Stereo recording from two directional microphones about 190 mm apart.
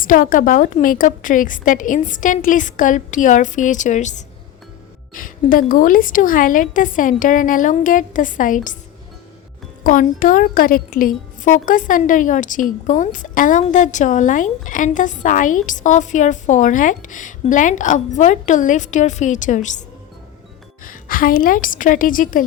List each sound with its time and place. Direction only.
0.0 s a woman's voice: 45° left (ahead or behind)
9.8 s a woman's voice: 45° left (ahead or behind)
20.8 s a woman's voice: 50° left (ahead or behind)